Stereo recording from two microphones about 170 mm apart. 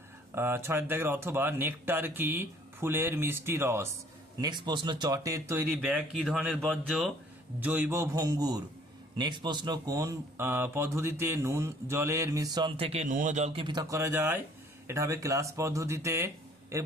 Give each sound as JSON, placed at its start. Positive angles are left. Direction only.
{"t": 0.3, "sound": "speech", "side_deg": -15}
{"t": 7.6, "sound": "speech", "side_deg": -10}